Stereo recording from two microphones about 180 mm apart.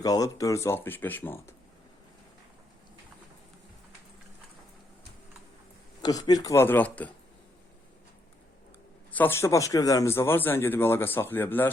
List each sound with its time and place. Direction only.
0.0 s speech: 20° left (ahead or behind)
6.0 s speech: 20° left (ahead or behind)
9.1 s speech: 10° left (ahead or behind)